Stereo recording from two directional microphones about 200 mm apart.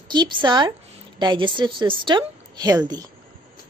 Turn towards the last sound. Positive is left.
turn(degrees=-20)  # may be behind; listen again after turning